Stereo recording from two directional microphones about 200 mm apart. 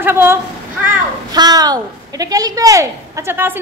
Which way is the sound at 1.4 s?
20° right (ahead or behind).